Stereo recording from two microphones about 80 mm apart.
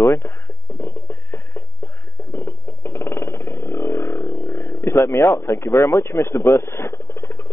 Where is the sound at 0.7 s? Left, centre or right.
Left.